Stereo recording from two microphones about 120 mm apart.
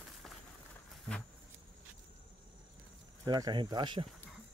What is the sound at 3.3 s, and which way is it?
Speech, 35° right (ahead or behind).